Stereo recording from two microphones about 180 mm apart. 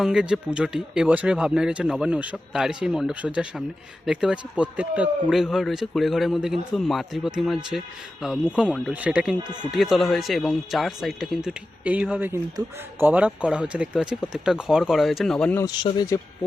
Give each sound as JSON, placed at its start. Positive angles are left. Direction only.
{"t": 0.0, "sound": "speech", "side_deg": -5}
{"t": 9.4, "sound": "speech", "side_deg": -25}
{"t": 9.7, "sound": "speech", "side_deg": 0}
{"t": 15.6, "sound": "speech", "side_deg": 25}